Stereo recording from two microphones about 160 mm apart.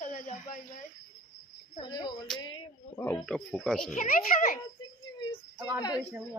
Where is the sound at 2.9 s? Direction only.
15° left (ahead or behind).